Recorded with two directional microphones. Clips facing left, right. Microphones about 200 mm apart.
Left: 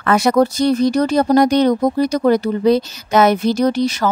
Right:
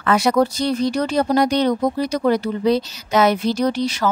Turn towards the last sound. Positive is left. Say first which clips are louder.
# left 4 dB
turn(degrees=45)  # may be behind; listen again after turning